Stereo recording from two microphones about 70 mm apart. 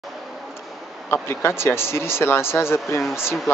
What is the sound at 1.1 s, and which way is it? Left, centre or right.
Speech, left.